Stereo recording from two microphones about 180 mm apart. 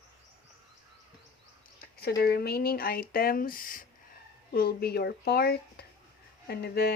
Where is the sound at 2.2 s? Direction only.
60° left (ahead or behind).